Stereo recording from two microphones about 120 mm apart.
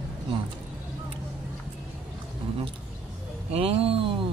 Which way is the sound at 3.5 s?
55° right (ahead or behind).